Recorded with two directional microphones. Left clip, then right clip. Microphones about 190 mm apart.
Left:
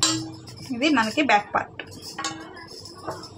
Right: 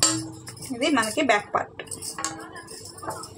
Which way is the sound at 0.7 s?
20° right (ahead or behind).